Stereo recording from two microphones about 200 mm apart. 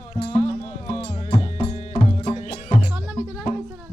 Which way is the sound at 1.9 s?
25° left (ahead or behind).